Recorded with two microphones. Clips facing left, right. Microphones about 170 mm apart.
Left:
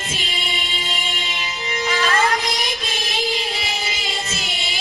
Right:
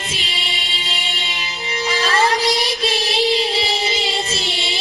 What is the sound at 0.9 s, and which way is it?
Music, 35° right (ahead or behind).